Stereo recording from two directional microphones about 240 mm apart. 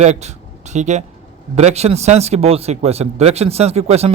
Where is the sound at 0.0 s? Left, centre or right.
Right.